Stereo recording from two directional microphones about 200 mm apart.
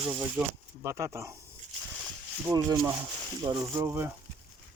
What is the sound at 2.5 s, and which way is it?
Speech, 20° right (ahead or behind).